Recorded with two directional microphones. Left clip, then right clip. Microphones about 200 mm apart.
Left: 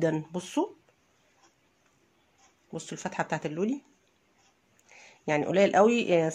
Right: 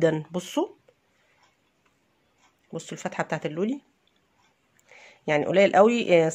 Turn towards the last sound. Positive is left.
turn(degrees=-15)  # may be behind; listen again after turning